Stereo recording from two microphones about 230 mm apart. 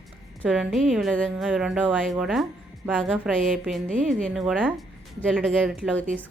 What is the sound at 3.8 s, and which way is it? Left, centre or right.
Speech, right.